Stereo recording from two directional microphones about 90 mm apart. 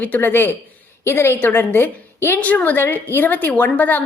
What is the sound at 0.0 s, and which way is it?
A woman's voice, 20° left (ahead or behind).